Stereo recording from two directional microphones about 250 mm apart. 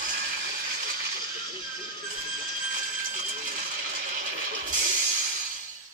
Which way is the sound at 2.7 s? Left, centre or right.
Right.